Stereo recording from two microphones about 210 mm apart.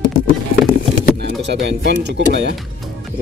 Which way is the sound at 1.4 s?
55° right (ahead or behind).